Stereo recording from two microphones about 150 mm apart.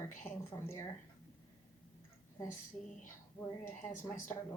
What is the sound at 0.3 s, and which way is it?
Speech, 40° left (ahead or behind).